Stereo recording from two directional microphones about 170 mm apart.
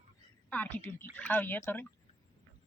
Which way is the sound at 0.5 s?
10° left (ahead or behind).